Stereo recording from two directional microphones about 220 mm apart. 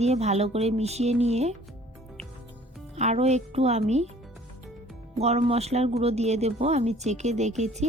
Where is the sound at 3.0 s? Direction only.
30° right (ahead or behind).